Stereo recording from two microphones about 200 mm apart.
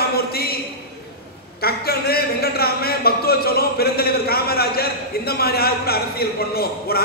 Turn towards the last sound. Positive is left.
turn(degrees=50)  # may be behind; listen again after turning